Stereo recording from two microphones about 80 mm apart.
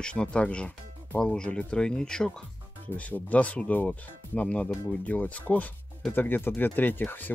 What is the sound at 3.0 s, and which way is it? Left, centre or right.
Speech, centre.